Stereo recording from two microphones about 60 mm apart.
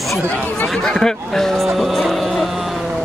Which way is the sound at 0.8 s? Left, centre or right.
Centre.